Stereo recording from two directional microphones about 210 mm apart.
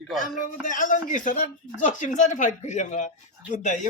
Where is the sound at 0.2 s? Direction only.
40° left (ahead or behind).